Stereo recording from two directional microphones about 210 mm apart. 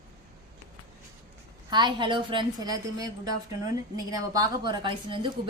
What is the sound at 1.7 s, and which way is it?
A woman's voice, 20° right (ahead or behind).